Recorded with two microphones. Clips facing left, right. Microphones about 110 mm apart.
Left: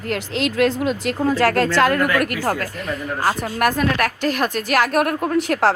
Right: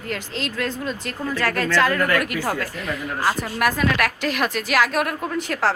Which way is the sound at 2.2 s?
45° left (ahead or behind).